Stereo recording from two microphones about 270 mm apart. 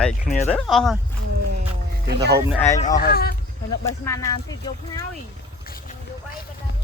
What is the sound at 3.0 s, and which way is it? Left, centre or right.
Speech, left.